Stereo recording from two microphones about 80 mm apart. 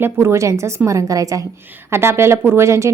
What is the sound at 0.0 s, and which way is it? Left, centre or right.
A woman's voice, right.